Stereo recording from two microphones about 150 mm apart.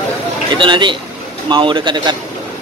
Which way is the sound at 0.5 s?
30° right (ahead or behind).